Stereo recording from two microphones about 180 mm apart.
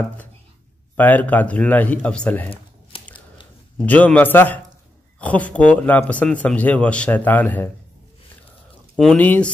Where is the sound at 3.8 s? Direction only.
10° left (ahead or behind).